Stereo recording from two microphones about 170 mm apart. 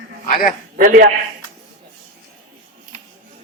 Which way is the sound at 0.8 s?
55° right (ahead or behind).